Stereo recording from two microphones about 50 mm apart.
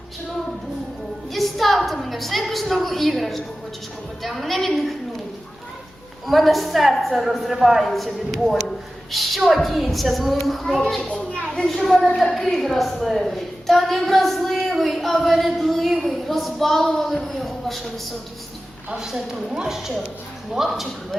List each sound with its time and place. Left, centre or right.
1.3 s a sound: centre
4.2 s a woman's voice: centre
6.2 s a woman's voice: centre
11.1 s a child's voice: centre
11.3 s a sound: centre
12.1 s a woman's voice: centre
18.9 s a woman's voice: centre